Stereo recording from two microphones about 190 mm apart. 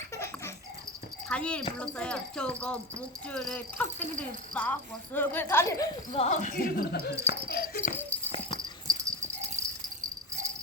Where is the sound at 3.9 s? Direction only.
35° right (ahead or behind).